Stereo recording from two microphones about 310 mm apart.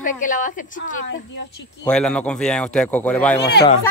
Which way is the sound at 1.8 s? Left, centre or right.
Centre.